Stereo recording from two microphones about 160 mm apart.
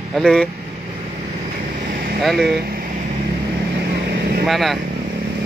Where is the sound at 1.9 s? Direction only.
60° right (ahead or behind).